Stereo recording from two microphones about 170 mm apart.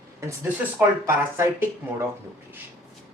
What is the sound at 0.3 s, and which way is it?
Speech, 15° right (ahead or behind).